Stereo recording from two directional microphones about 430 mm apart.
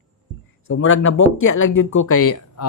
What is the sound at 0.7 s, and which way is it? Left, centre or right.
Speech, left.